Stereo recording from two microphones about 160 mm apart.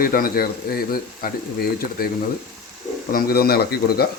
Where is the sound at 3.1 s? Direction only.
70° left (ahead or behind).